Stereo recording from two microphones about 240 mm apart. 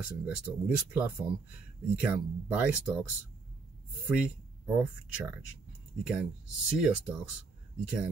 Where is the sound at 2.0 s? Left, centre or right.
Centre.